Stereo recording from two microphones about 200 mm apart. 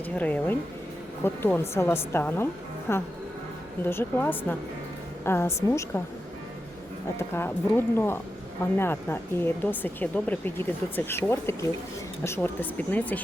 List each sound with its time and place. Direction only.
0.1 s speech: 5° left (ahead or behind)
7.2 s speech: 10° left (ahead or behind)